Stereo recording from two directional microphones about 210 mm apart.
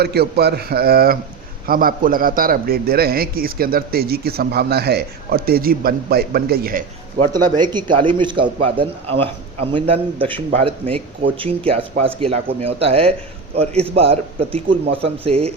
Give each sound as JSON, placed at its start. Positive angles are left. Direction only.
{"t": 0.0, "sound": "a man's voice", "side_deg": -50}
{"t": 7.5, "sound": "speech", "side_deg": -20}